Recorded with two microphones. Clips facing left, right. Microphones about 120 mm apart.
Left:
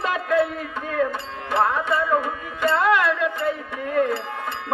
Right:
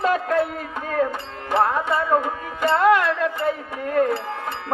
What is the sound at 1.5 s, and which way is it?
Music, 35° right (ahead or behind).